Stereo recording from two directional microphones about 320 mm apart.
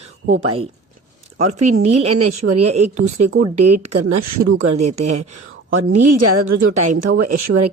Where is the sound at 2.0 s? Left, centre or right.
Right.